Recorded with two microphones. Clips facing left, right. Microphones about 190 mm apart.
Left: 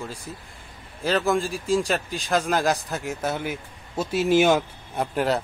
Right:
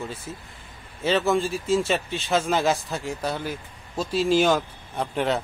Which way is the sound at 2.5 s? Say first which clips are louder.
Even; centre (ahead or behind).